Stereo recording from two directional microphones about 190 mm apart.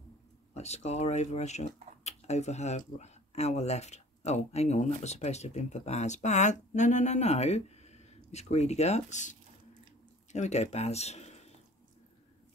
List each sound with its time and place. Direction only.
0.6 s speech: 35° left (ahead or behind)
10.3 s speech: 35° left (ahead or behind)